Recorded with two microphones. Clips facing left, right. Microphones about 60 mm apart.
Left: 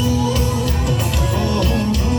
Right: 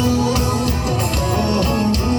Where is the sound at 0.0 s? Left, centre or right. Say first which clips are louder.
Right 1 dB; right.